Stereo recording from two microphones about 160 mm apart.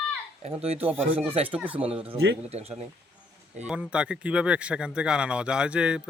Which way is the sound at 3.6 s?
5° right (ahead or behind).